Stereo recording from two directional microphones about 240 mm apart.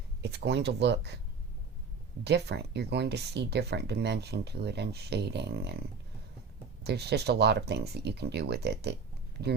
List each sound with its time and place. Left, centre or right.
0.2 s speech: right
2.2 s speech: right
6.8 s speech: right